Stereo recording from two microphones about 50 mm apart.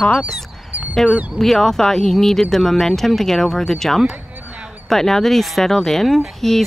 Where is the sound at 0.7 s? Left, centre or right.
Right.